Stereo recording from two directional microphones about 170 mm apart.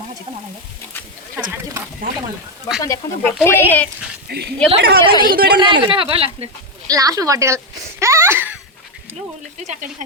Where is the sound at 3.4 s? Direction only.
15° left (ahead or behind).